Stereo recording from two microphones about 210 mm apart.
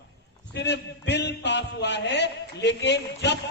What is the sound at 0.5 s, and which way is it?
A man's voice, 55° left (ahead or behind).